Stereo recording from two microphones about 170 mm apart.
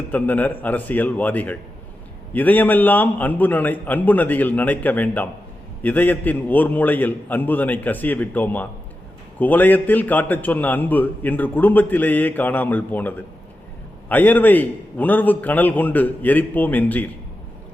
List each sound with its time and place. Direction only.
0.1 s a man's voice: 10° left (ahead or behind)